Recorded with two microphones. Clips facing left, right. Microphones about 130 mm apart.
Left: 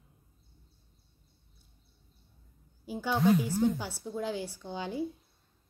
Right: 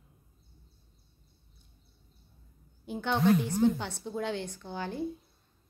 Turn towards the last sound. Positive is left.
turn(degrees=15)  # may be behind; listen again after turning